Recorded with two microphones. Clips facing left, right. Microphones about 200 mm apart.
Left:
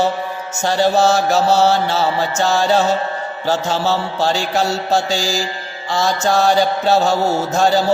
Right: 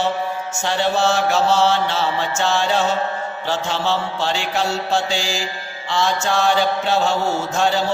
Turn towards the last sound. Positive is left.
turn(degrees=40)  # may be behind; listen again after turning